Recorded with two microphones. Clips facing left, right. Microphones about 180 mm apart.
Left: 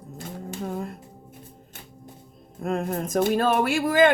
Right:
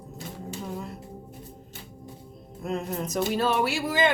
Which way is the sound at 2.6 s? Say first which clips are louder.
Left 3 dB; 50° left (ahead or behind).